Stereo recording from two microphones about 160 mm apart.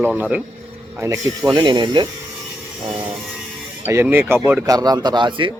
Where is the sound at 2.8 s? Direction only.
30° right (ahead or behind).